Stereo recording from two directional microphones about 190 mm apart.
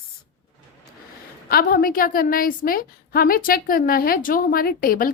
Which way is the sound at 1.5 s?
50° left (ahead or behind).